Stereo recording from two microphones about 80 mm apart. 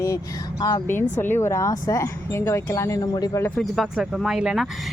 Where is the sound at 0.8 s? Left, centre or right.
Left.